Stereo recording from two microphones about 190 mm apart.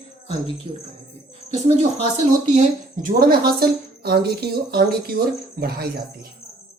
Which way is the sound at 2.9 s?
50° right (ahead or behind).